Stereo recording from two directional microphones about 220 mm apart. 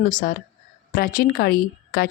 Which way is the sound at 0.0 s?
40° left (ahead or behind).